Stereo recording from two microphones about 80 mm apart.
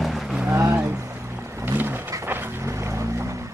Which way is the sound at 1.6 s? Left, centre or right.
Right.